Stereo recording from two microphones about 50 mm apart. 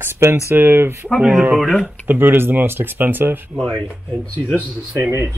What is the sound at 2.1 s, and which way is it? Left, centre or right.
Speech, right.